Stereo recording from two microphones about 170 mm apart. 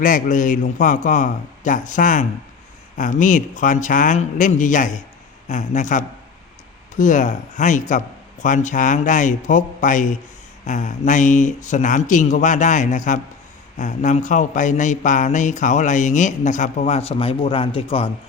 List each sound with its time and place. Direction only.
0.0 s a man's voice: 50° left (ahead or behind); by 18.1 s 35° left (ahead or behind)